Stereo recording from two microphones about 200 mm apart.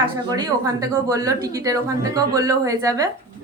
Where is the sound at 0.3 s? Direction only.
20° right (ahead or behind).